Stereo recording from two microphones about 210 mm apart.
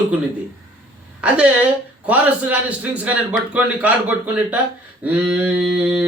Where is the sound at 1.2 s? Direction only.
5° right (ahead or behind).